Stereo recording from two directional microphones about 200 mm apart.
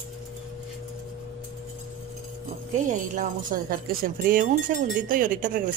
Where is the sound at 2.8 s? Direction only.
40° right (ahead or behind).